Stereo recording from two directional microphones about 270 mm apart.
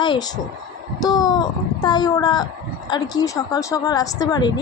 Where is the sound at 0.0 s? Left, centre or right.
Centre.